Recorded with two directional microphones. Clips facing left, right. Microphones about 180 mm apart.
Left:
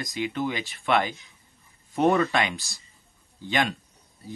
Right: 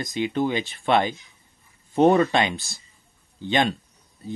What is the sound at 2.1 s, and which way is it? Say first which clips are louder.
Speech: right 4 dB; 30° right (ahead or behind).